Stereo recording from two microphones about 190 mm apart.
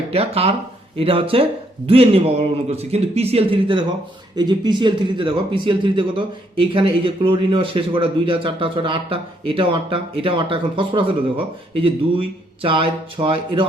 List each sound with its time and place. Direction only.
0.1 s speech: 30° right (ahead or behind)